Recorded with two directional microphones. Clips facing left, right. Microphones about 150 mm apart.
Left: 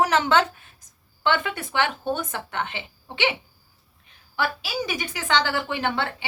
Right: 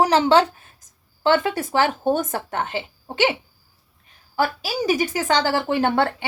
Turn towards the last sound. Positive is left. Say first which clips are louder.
# right 7 dB
turn(degrees=-50)  # may be behind; listen again after turning